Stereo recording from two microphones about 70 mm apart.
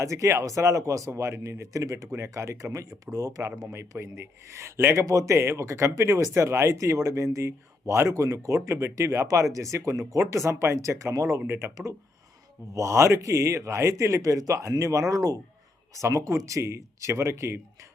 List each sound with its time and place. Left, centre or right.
0.0 s speech: right
3.7 s speech: right
11.3 s speech: right
12.7 s speech: right